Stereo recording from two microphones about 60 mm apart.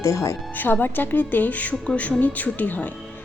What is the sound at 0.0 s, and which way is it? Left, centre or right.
Speech, left.